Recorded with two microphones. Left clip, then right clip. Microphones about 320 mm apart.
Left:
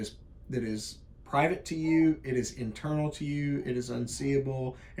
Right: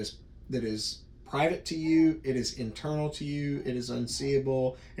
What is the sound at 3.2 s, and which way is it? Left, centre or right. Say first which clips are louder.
Speech: left 1 dB; right.